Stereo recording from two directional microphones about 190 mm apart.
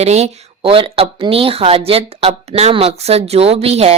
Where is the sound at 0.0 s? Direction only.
35° right (ahead or behind).